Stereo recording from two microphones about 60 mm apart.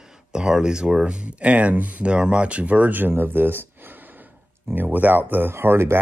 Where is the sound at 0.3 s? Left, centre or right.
Centre.